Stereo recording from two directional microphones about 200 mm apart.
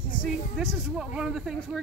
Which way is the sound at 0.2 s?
5° left (ahead or behind).